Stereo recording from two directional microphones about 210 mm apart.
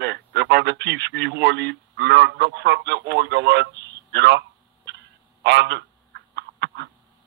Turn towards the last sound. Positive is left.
turn(degrees=-55)  # may be behind; listen again after turning